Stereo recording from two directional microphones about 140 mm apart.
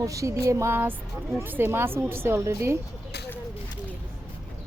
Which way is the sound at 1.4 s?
15° right (ahead or behind).